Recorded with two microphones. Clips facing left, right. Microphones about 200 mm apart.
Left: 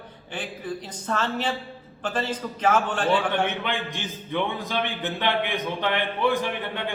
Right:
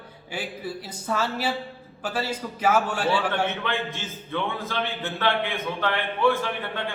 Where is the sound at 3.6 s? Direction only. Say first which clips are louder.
Even; 15° left (ahead or behind).